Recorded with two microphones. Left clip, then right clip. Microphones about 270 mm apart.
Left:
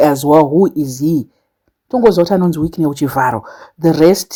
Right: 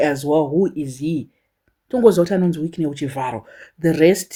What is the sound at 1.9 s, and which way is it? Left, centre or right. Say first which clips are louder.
Speech: left 3 dB; centre.